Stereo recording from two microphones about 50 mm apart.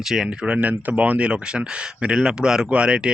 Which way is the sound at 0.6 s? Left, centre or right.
Right.